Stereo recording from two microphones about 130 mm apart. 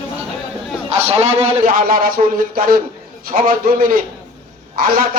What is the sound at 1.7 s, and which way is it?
Speech, 90° right.